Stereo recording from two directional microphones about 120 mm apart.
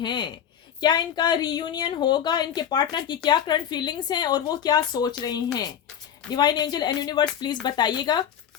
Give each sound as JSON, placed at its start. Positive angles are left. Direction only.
{"t": 0.0, "sound": "speech", "side_deg": 40}